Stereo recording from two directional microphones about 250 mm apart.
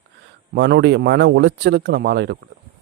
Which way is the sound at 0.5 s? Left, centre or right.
Right.